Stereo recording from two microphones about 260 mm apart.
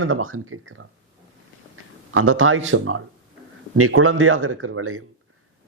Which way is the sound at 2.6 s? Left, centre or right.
Right.